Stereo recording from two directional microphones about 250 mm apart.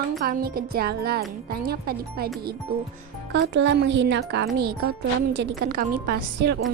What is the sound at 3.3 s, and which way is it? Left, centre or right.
A woman's voice, right.